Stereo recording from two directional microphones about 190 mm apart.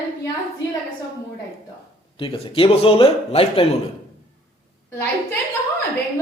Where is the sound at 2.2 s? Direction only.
30° left (ahead or behind).